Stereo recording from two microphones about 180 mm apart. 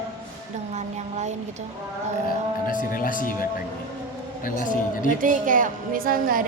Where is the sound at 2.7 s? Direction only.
50° left (ahead or behind).